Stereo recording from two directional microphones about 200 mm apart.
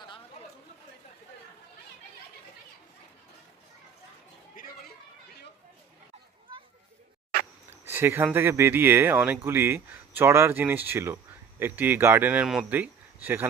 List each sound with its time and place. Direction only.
4.5 s chatter: 45° left (ahead or behind)
7.9 s speech: 10° right (ahead or behind)